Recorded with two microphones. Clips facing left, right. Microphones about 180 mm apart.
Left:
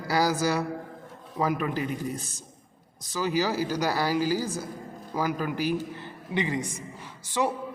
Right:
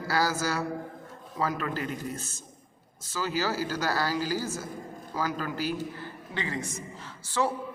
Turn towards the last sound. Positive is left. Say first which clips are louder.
# left 1 dB
turn(degrees=15)  # may be behind; listen again after turning